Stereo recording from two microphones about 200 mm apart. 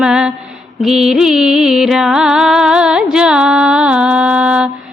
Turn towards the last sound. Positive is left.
turn(degrees=-5)  # may be behind; listen again after turning